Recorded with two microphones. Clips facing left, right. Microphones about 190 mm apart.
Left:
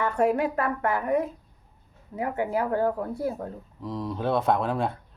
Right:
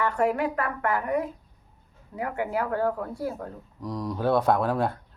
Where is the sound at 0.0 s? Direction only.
25° left (ahead or behind).